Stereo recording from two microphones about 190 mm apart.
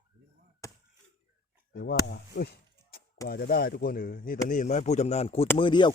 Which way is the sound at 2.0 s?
55° left (ahead or behind).